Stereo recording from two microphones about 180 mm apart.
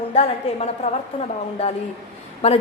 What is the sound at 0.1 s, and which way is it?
Speech, 40° left (ahead or behind).